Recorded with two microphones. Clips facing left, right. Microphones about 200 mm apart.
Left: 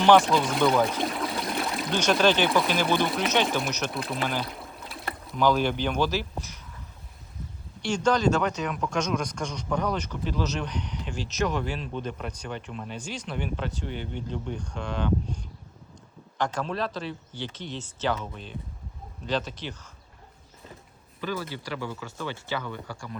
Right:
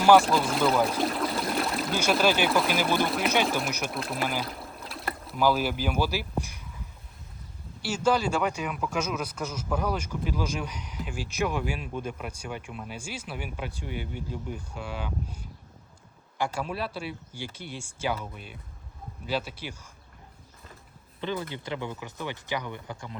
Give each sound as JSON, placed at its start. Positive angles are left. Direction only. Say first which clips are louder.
{"t": 0.0, "sound": "speech", "louder": "even", "side_deg": -5}
{"t": 7.8, "sound": "speech", "louder": "left 1 dB", "side_deg": -5}
{"t": 21.2, "sound": "speech", "louder": "even", "side_deg": -20}